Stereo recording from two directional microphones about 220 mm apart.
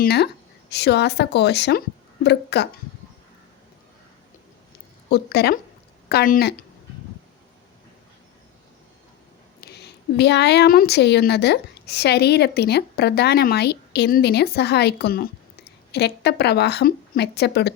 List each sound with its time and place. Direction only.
0.0 s a woman's voice: 50° left (ahead or behind)
5.0 s a woman's voice: 45° left (ahead or behind)
9.6 s a woman's voice: 45° left (ahead or behind)